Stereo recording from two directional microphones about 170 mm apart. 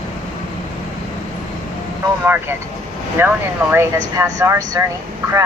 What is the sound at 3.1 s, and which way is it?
Speech, 10° right (ahead or behind).